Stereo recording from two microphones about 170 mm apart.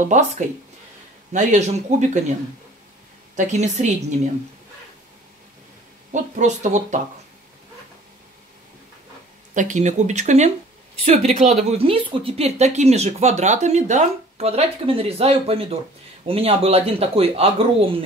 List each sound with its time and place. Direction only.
0.1 s speech: 45° right (ahead or behind)
3.3 s speech: 45° right (ahead or behind)
6.1 s speech: 45° right (ahead or behind)
9.5 s speech: 50° right (ahead or behind)